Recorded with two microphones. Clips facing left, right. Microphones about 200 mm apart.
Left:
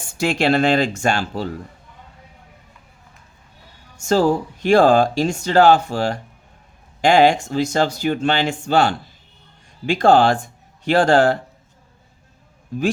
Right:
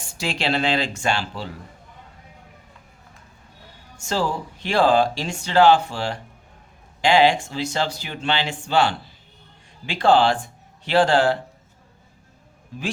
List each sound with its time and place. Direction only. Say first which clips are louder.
0.2 s speech: left 7 dB; 50° left (ahead or behind)
3.9 s speech: left 8 dB; 45° left (ahead or behind)